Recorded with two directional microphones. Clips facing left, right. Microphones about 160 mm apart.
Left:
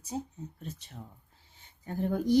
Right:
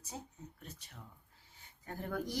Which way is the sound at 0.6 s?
25° left (ahead or behind).